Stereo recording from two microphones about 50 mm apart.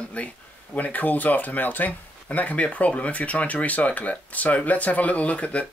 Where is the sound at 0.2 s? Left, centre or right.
Left.